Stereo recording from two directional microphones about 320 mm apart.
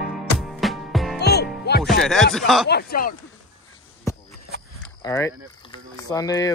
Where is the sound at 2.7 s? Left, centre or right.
Left.